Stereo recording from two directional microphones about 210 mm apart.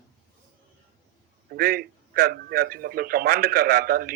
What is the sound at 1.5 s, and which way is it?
A man's voice, 45° right (ahead or behind).